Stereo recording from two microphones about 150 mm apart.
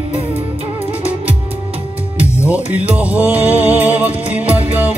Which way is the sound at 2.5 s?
10° right (ahead or behind).